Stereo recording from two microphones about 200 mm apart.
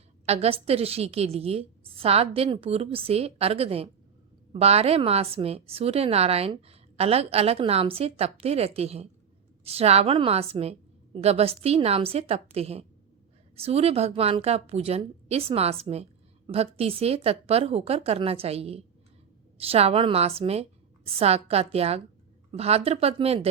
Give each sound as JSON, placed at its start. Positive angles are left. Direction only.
{"t": 0.3, "sound": "a woman's voice", "side_deg": -30}